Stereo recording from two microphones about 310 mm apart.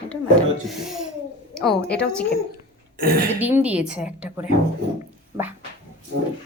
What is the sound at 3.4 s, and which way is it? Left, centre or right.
A woman's voice, centre.